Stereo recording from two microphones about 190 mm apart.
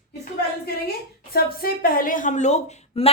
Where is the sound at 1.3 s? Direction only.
50° left (ahead or behind); by 3.1 s 35° left (ahead or behind).